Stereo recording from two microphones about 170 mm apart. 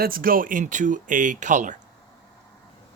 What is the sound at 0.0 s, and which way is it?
Speech, 60° right (ahead or behind).